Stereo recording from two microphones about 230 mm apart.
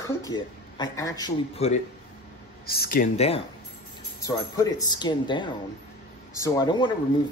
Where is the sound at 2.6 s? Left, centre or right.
Left.